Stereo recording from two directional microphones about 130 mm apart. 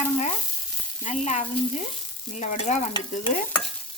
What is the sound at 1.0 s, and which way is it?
Speech, 65° left (ahead or behind).